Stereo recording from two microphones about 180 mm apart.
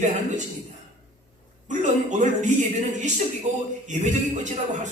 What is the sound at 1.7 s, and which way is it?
A man's voice, 45° right (ahead or behind).